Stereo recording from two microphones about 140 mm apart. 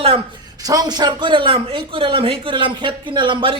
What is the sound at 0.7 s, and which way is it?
Speech, 30° right (ahead or behind).